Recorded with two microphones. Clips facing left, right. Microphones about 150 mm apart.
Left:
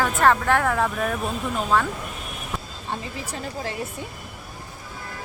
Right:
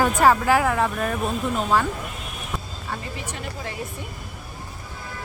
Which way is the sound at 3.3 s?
30° left (ahead or behind).